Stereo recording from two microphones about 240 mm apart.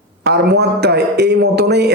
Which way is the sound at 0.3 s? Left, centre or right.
Right.